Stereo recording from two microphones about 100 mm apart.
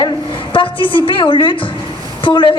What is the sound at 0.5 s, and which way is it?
A woman's voice, 55° left (ahead or behind).